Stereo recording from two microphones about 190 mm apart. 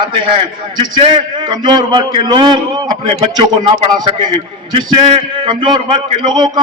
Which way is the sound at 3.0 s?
35° right (ahead or behind).